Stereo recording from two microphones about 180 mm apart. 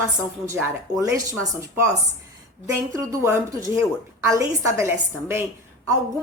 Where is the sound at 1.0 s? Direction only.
15° right (ahead or behind).